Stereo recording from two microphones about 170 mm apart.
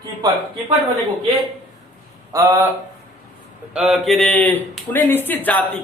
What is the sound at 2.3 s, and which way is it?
Speech, 20° right (ahead or behind).